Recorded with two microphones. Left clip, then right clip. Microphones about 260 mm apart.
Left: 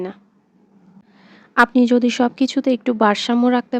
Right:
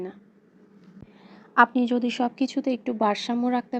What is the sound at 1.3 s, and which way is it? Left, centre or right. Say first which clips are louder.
A woman's voice: left 4 dB; left.